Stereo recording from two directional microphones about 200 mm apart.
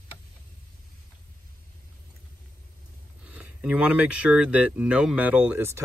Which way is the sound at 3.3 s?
5° right (ahead or behind).